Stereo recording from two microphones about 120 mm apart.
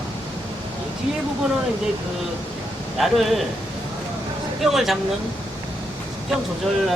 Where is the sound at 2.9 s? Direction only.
Centre (ahead or behind).